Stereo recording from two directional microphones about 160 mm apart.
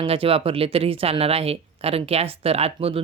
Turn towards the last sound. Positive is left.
turn(degrees=-35)  # may be behind; listen again after turning